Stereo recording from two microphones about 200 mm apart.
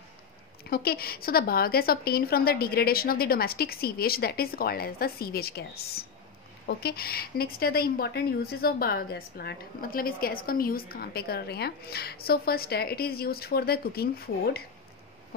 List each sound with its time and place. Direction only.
0.7 s a woman's voice: 50° left (ahead or behind)